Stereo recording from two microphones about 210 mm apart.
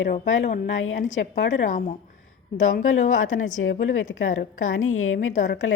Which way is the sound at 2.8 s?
70° left (ahead or behind).